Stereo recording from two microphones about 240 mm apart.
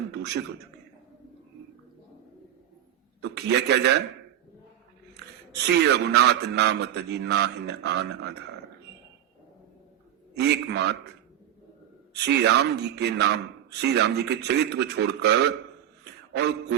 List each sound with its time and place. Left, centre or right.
3.2 s a man's voice: right
5.6 s a man's voice: right
10.3 s a man's voice: right
12.2 s a man's voice: right